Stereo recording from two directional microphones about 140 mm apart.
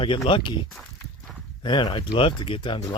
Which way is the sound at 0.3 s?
35° left (ahead or behind).